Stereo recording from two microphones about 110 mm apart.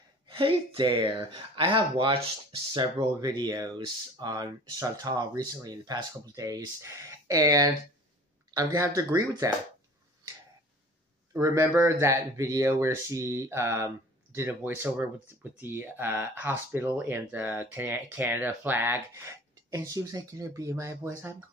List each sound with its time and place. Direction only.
0.3 s speech: 50° right (ahead or behind); by 9.6 s 30° right (ahead or behind)
11.3 s speech: 25° right (ahead or behind)